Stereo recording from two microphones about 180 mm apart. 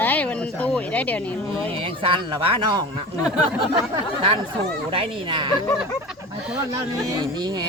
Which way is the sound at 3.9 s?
30° right (ahead or behind).